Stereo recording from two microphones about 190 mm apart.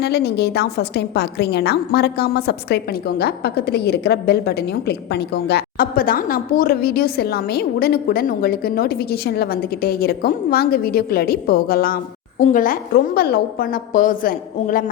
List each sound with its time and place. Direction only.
0.0 s a woman's voice: 60° left (ahead or behind)